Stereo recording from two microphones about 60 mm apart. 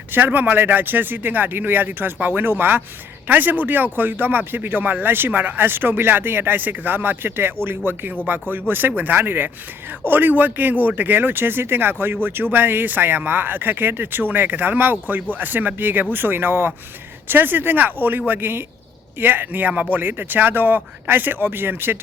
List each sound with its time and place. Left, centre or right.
0.1 s speech: right